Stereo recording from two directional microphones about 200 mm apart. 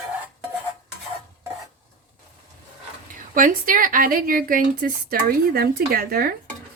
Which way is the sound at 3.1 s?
45° right (ahead or behind).